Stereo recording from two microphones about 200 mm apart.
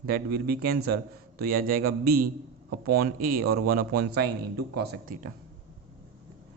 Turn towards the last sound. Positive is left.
turn(degrees=-45)  # may be behind; listen again after turning